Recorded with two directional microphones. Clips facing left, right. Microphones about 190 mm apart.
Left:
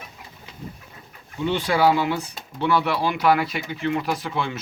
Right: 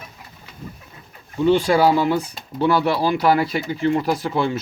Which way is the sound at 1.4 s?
40° right (ahead or behind).